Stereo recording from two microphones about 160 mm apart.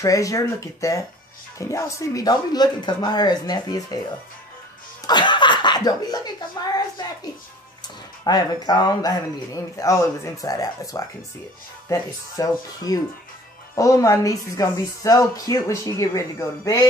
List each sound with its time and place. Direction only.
0.0 s speech: 20° left (ahead or behind)
5.0 s speech: 30° left (ahead or behind)
7.8 s speech: 25° left (ahead or behind)